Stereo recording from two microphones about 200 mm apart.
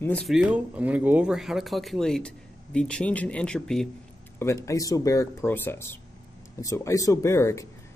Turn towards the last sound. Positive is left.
turn(degrees=15)  # may be behind; listen again after turning